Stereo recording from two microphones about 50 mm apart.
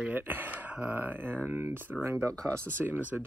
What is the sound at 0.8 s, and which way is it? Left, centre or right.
Speech, right.